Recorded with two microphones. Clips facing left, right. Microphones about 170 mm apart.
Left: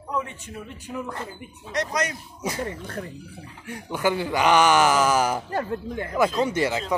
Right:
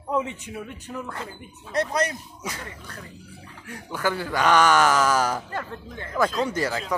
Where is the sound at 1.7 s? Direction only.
30° right (ahead or behind).